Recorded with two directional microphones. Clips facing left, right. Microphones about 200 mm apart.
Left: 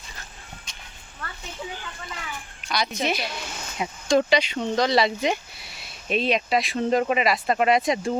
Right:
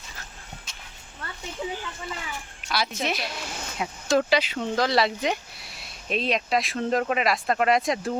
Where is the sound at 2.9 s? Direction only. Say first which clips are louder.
Left 2 dB; centre (ahead or behind).